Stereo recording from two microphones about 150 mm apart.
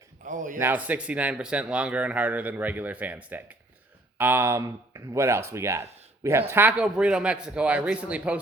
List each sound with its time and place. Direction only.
0.3 s speech: 60° right (ahead or behind)
0.6 s speech: 10° right (ahead or behind)